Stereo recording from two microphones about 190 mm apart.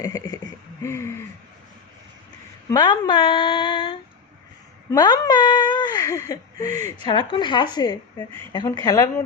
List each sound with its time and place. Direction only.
0.0 s speech: 20° left (ahead or behind)
0.8 s a sound: 15° left (ahead or behind)
2.6 s speech: 25° left (ahead or behind)